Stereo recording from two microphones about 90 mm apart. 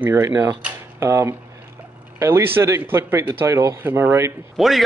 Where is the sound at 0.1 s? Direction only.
35° right (ahead or behind).